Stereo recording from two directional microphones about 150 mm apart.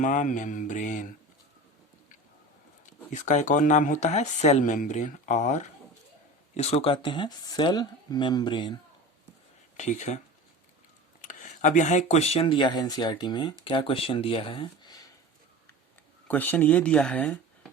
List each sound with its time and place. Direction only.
0.0 s speech: 60° left (ahead or behind)
3.1 s speech: 55° left (ahead or behind); by 8.7 s 30° left (ahead or behind)
9.7 s speech: 55° left (ahead or behind)
11.2 s speech: 55° left (ahead or behind); by 15.1 s 25° left (ahead or behind)
16.2 s speech: 10° left (ahead or behind)